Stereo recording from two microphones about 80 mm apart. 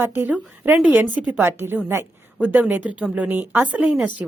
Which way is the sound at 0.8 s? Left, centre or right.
Centre.